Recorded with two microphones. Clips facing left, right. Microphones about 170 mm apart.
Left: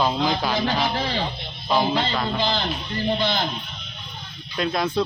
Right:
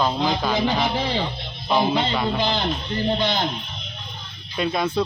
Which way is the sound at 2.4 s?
15° right (ahead or behind).